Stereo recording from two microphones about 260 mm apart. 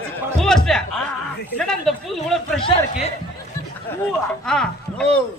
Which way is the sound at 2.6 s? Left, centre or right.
Left.